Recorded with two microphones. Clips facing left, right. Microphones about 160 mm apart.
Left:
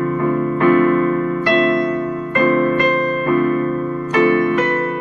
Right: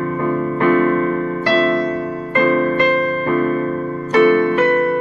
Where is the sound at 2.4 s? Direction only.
30° right (ahead or behind).